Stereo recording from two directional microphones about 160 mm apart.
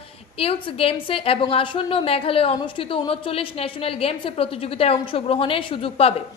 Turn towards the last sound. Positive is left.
turn(degrees=35)  # may be behind; listen again after turning